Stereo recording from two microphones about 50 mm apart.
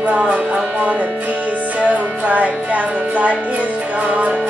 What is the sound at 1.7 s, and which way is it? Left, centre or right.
Music, right.